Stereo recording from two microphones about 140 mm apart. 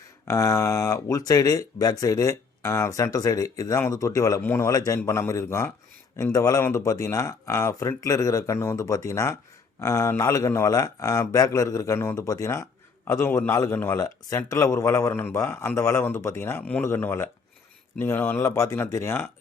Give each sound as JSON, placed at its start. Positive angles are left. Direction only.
{"t": 0.3, "sound": "a man's voice", "side_deg": 25}